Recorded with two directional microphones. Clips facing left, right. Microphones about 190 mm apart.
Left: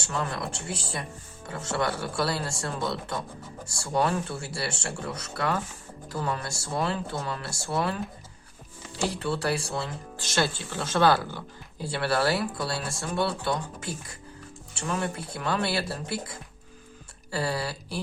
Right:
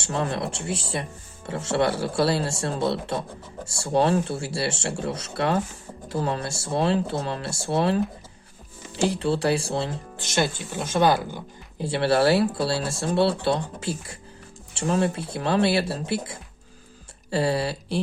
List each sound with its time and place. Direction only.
0.0 s speech: 30° right (ahead or behind)
9.2 s speech: 25° right (ahead or behind)